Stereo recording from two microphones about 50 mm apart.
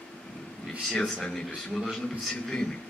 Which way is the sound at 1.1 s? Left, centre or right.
Centre.